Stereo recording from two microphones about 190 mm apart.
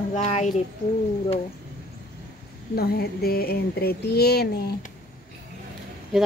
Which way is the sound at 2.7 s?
55° left (ahead or behind).